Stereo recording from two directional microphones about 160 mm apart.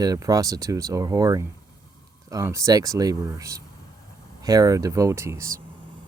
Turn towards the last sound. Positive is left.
turn(degrees=-20)  # may be behind; listen again after turning